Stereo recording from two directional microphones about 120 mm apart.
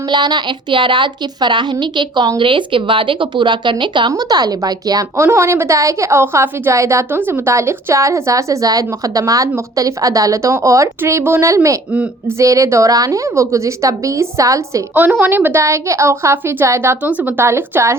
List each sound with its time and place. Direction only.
0.1 s a woman's voice: 40° right (ahead or behind)
14.9 s a woman's voice: 15° right (ahead or behind)